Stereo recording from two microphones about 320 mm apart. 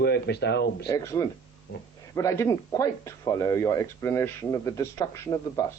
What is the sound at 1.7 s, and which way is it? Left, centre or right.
Speech, left.